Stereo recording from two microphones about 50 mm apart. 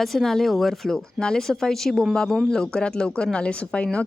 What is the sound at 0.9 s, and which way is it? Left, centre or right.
A woman's voice, centre.